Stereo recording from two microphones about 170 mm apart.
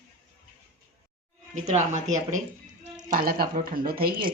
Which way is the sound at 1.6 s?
45° right (ahead or behind).